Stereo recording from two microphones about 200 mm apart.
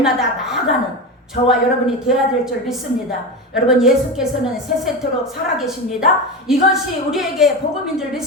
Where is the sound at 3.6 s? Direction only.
Centre (ahead or behind).